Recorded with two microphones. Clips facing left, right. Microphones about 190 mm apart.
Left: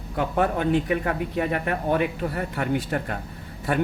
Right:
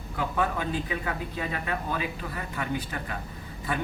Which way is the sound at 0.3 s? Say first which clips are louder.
Left 8 dB; 60° left (ahead or behind).